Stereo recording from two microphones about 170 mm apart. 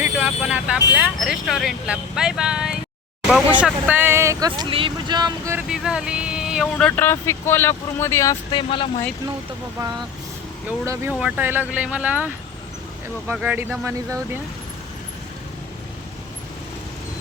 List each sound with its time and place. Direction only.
0.0 s vehicle: 10° right (ahead or behind)
0.9 s speech: 5° right (ahead or behind); by 5.5 s 25° right (ahead or behind)
5.5 s speech: 5° right (ahead or behind); by 8.4 s 15° left (ahead or behind)
8.5 s speech: 30° left (ahead or behind)
11.2 s speech: 10° right (ahead or behind)